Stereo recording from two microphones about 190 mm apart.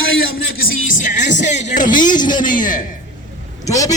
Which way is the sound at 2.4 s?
45° left (ahead or behind).